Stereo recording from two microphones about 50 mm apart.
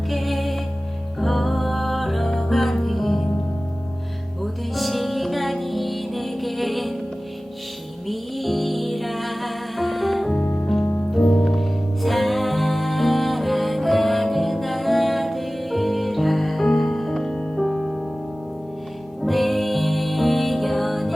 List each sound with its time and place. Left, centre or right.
0.1 s music: centre
4.7 s music: centre
8.0 s music: centre
11.2 s music: centre
11.4 s music: centre
19.2 s music: centre